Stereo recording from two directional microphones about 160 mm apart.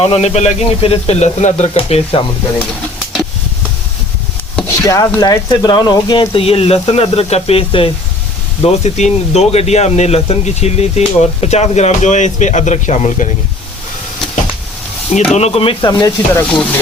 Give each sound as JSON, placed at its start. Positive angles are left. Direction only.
{"t": 0.0, "sound": "speech", "side_deg": 40}
{"t": 4.8, "sound": "speech", "side_deg": 20}
{"t": 15.3, "sound": "speech", "side_deg": 40}